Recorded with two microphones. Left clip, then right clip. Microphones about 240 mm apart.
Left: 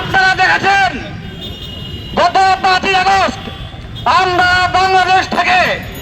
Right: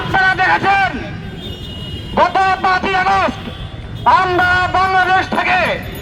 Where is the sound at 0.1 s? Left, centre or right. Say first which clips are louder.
Left 2 dB; left.